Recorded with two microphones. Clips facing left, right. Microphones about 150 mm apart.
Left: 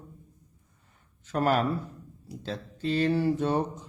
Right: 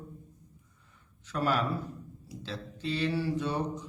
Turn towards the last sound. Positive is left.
turn(degrees=50)  # may be behind; listen again after turning